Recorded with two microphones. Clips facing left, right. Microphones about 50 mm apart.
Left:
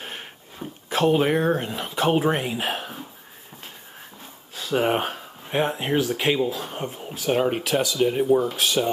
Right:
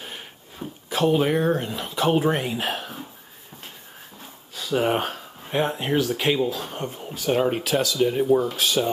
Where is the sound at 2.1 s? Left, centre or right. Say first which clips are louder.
Even; centre.